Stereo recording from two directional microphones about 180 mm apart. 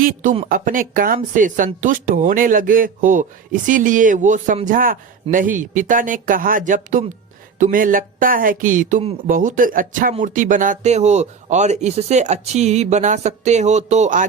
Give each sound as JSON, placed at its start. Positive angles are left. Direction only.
{"t": 0.0, "sound": "speech", "side_deg": -45}
{"t": 9.0, "sound": "speech", "side_deg": -35}
{"t": 9.3, "sound": "speech", "side_deg": -50}